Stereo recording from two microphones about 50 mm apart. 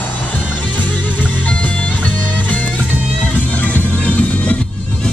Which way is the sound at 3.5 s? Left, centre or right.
Left.